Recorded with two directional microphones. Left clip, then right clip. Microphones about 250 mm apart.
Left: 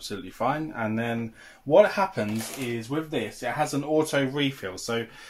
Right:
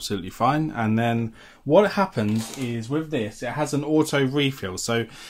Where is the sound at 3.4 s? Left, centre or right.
Right.